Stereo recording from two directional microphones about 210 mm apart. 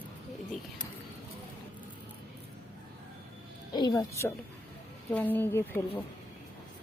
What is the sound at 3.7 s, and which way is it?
A woman's voice, 20° left (ahead or behind).